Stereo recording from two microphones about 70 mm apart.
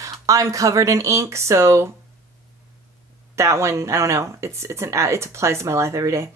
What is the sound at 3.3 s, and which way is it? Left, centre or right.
Speech, right.